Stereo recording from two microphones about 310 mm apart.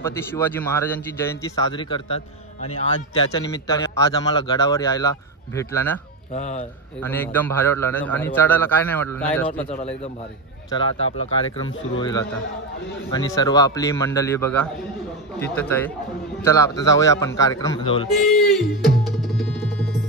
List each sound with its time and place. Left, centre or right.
0.0 s a man's voice: centre
6.3 s speech: left
7.0 s a man's voice: centre
10.7 s a man's voice: centre
18.2 s music: centre